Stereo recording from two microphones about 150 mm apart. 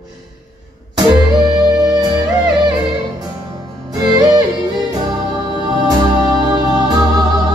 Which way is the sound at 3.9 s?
25° right (ahead or behind).